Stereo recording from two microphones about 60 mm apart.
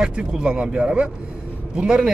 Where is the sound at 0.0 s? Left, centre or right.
Centre.